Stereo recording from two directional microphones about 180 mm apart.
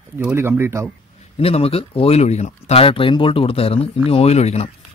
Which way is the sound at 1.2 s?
35° left (ahead or behind).